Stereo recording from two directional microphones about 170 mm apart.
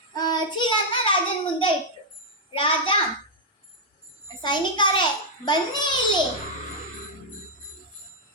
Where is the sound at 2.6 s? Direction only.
30° left (ahead or behind).